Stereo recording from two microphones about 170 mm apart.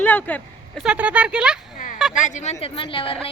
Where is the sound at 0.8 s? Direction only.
5° right (ahead or behind).